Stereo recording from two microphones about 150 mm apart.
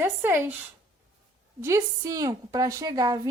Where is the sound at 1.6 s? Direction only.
20° right (ahead or behind).